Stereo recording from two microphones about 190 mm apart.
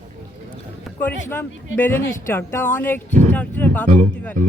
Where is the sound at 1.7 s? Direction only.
10° left (ahead or behind).